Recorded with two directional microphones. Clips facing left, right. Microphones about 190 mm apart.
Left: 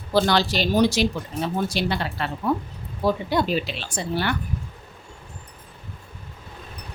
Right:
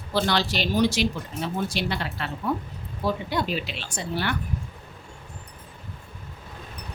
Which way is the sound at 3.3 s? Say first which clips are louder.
Left 5 dB; 35° left (ahead or behind).